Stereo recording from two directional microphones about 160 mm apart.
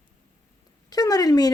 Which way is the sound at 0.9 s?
25° left (ahead or behind).